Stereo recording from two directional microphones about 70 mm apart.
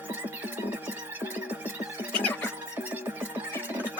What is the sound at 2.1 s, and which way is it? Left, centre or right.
Music, left.